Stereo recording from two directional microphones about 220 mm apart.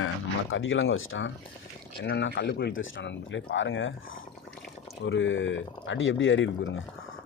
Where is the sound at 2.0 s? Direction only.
55° left (ahead or behind).